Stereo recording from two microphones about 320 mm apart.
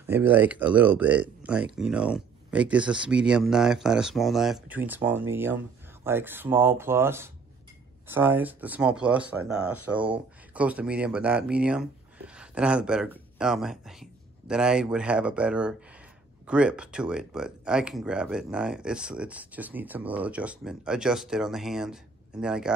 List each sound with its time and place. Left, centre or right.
0.0 s speech: centre